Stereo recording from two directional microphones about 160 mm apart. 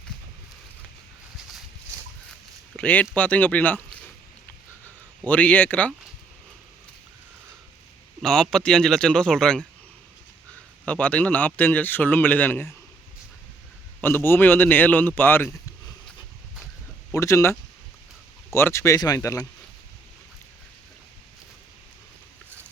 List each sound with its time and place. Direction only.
2.7 s speech: 10° left (ahead or behind)
5.2 s speech: 10° left (ahead or behind)
8.2 s a man's voice: 5° left (ahead or behind)
10.8 s speech: 10° left (ahead or behind)
14.0 s speech: 15° left (ahead or behind)
17.1 s speech: 20° left (ahead or behind)